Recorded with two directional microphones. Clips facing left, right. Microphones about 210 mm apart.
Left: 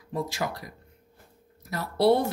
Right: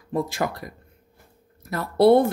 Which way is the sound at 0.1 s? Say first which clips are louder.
Right 5 dB; 55° right (ahead or behind).